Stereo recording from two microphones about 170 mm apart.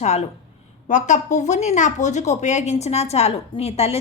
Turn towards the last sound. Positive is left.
turn(degrees=35)  # may be behind; listen again after turning